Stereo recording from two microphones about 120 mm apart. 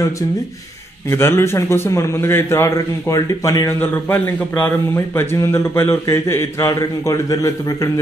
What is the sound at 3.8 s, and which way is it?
A man's voice, 15° left (ahead or behind).